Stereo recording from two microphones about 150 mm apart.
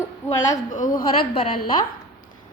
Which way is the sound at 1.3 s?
40° left (ahead or behind).